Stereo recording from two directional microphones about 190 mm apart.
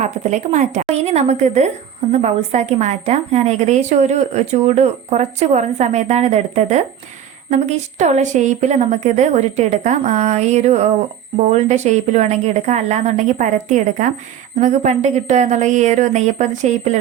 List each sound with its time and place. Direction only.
0.0 s a woman's voice: 40° right (ahead or behind)